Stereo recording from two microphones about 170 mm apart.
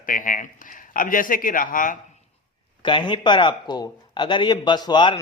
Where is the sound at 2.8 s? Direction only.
30° left (ahead or behind).